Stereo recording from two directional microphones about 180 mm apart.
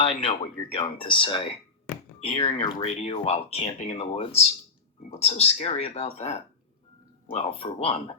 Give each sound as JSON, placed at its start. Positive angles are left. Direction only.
{"t": 0.0, "sound": "speech", "side_deg": 30}